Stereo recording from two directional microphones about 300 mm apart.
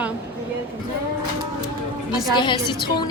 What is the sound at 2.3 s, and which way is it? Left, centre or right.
Speech, centre.